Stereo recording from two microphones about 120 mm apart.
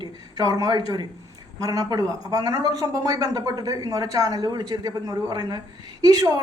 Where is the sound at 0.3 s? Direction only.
30° right (ahead or behind).